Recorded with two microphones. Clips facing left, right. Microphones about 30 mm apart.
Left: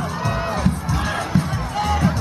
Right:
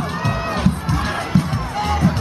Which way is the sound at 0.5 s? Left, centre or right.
Right.